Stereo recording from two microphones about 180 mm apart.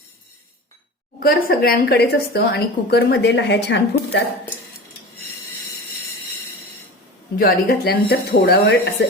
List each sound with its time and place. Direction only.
1.2 s a woman's voice: 55° left (ahead or behind); by 4.2 s 75° left (ahead or behind)
7.3 s a woman's voice: 55° left (ahead or behind)